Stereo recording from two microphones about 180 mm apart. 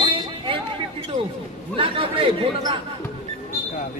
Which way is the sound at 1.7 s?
30° right (ahead or behind).